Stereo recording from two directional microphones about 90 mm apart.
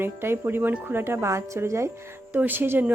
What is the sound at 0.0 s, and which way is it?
A woman's voice, 25° right (ahead or behind).